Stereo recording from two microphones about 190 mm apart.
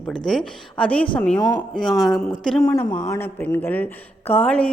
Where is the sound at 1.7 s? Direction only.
Centre (ahead or behind).